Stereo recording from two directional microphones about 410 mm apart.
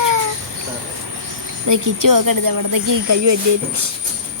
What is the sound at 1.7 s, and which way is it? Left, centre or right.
Speech, right.